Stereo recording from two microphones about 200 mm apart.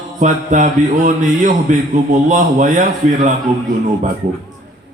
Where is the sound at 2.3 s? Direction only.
40° right (ahead or behind).